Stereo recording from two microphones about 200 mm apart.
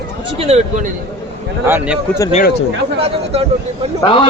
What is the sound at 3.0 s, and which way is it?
Speech, 30° right (ahead or behind).